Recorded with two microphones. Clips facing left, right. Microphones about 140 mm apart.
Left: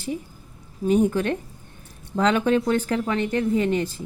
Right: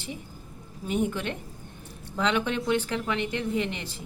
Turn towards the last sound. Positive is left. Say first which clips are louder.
# left 7 dB
turn(degrees=40)  # may be behind; listen again after turning